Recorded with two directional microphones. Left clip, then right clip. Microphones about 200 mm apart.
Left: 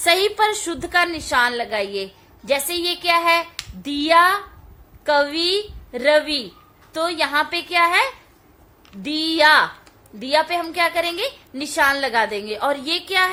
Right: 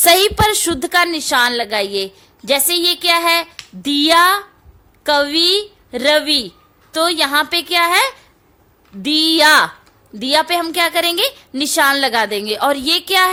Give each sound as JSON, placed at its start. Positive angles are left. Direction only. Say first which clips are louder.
{"t": 0.0, "sound": "a woman's voice", "louder": "right 5 dB", "side_deg": -45}